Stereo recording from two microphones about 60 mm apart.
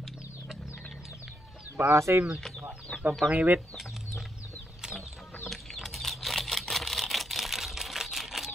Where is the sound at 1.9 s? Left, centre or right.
Right.